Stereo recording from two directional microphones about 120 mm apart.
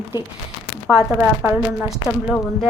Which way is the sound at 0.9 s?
5° right (ahead or behind).